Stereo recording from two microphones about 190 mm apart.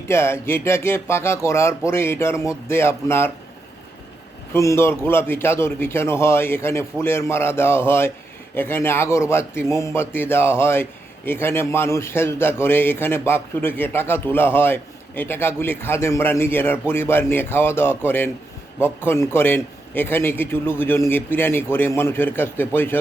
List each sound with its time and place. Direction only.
0.1 s a man's voice: 15° left (ahead or behind)
4.5 s a man's voice: 15° left (ahead or behind)